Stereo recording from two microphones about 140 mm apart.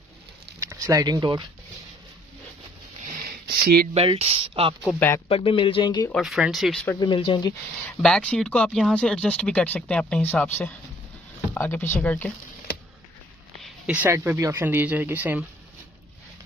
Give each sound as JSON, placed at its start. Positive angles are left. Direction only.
{"t": 0.6, "sound": "speech", "side_deg": -20}
{"t": 3.5, "sound": "speech", "side_deg": -90}
{"t": 3.9, "sound": "speech", "side_deg": -45}
{"t": 4.9, "sound": "speech", "side_deg": 15}
{"t": 5.3, "sound": "speech", "side_deg": 40}
{"t": 6.1, "sound": "speech", "side_deg": 0}
{"t": 7.0, "sound": "speech", "side_deg": 35}
{"t": 8.0, "sound": "speech", "side_deg": 5}
{"t": 11.5, "sound": "speech", "side_deg": 15}
{"t": 13.6, "sound": "speech", "side_deg": -10}